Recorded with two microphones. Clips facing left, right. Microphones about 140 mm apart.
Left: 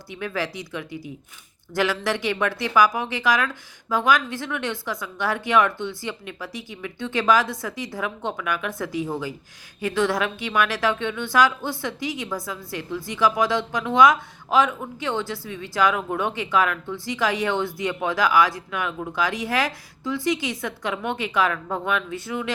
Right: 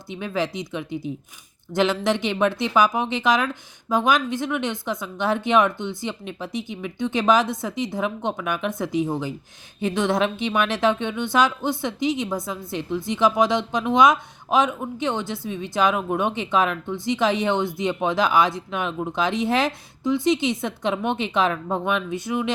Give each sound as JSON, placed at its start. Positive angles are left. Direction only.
{"t": 0.1, "sound": "speech", "side_deg": -20}